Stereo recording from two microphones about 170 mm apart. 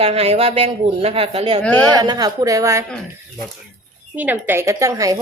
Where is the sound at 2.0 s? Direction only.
20° right (ahead or behind).